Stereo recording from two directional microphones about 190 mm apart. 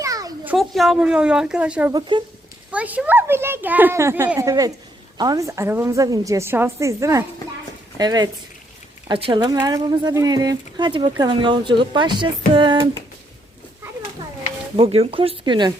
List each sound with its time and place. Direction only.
0.0 s a sound: 20° right (ahead or behind)
0.5 s a woman's voice: centre (ahead or behind)
1.9 s speech: 25° right (ahead or behind)
2.7 s a woman's voice: 10° right (ahead or behind); by 12.3 s 25° right (ahead or behind)
12.5 s a sound: 25° right (ahead or behind)
14.8 s speech: 30° right (ahead or behind)